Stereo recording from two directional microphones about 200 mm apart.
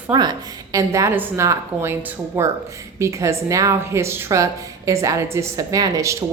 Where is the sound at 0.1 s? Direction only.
20° right (ahead or behind).